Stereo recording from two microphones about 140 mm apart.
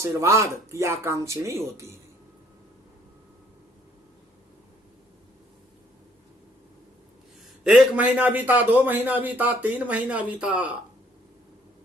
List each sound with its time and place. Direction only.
0.0 s speech: 20° right (ahead or behind)
7.6 s a man's voice: 5° right (ahead or behind)